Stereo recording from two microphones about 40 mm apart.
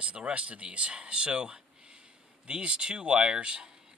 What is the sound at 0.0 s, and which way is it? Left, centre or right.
Speech, right.